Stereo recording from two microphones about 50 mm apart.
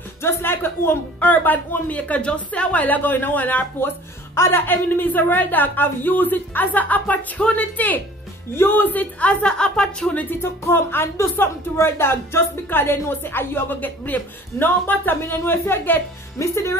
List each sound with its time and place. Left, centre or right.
0.2 s speech: left
9.2 s a woman's voice: left
9.5 s speech: centre
10.4 s a woman's voice: left
16.3 s speech: left